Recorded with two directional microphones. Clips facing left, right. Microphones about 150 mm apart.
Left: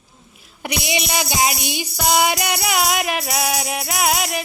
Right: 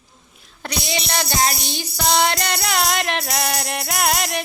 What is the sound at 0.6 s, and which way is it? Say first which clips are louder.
Music: left 2 dB; 15° left (ahead or behind).